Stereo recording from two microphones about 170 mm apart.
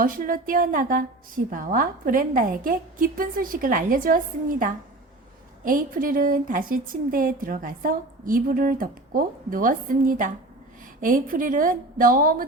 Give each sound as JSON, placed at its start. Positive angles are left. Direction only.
{"t": 0.0, "sound": "a woman's voice", "side_deg": -55}